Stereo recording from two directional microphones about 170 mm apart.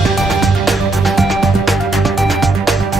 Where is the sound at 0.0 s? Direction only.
Centre (ahead or behind).